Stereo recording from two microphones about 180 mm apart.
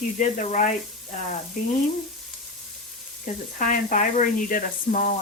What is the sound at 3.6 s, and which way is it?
Speech, 45° left (ahead or behind).